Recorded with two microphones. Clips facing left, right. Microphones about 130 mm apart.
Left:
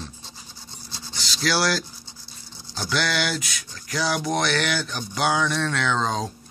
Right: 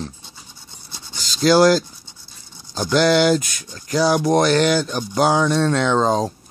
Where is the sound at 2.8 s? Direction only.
40° right (ahead or behind).